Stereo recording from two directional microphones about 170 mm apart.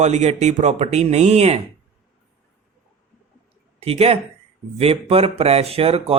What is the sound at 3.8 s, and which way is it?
Speech, 35° right (ahead or behind).